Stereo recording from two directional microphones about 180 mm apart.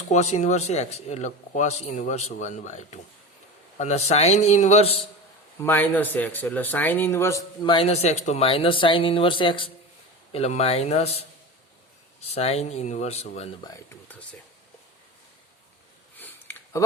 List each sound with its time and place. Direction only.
0.1 s speech: 40° left (ahead or behind)
5.6 s speech: 10° left (ahead or behind); by 13.6 s 35° left (ahead or behind)
13.7 s speech: 15° left (ahead or behind)
16.1 s a sound: 10° left (ahead or behind)